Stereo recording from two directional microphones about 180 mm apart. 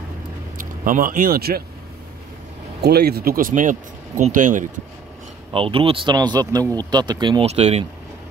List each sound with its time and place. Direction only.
0.6 s speech: 50° right (ahead or behind)
2.8 s speech: 60° right (ahead or behind); by 4.6 s 45° right (ahead or behind)
5.5 s speech: 30° right (ahead or behind)